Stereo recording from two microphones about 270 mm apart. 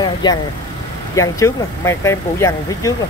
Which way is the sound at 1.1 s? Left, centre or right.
Centre.